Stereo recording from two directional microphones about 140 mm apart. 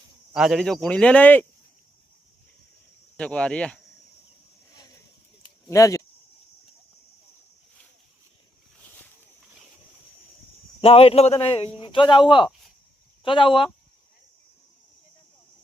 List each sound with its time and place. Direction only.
0.3 s speech: 5° right (ahead or behind); by 1.5 s 10° left (ahead or behind)
3.2 s speech: 5° left (ahead or behind)
5.6 s speech: 25° left (ahead or behind)
10.8 s a man's voice: 45° left (ahead or behind)